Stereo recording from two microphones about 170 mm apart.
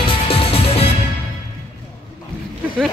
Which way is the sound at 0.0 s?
30° left (ahead or behind).